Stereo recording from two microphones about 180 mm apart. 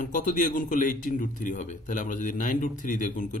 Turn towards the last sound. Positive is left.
turn(degrees=45)  # may be behind; listen again after turning